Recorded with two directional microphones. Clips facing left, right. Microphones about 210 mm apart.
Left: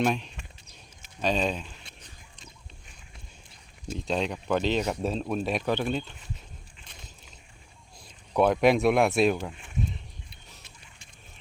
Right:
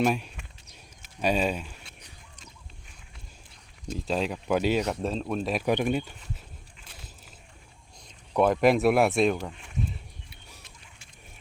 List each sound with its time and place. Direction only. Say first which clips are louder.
0.0 s speech: right 1 dB; 5° right (ahead or behind)
1.2 s a sound: right 1 dB; 10° right (ahead or behind)
3.8 s speech: even; 5° right (ahead or behind)
5.6 s speech: right 2 dB; 15° right (ahead or behind)
8.0 s speech: even; centre (ahead or behind)